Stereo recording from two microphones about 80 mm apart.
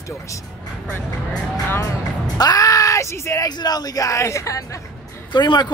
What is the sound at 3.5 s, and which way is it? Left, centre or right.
Speech, left.